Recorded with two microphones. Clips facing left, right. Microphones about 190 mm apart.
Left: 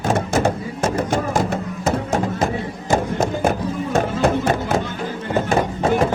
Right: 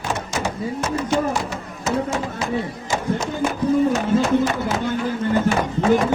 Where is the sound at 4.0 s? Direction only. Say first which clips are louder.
Right 1 dB; 50° left (ahead or behind).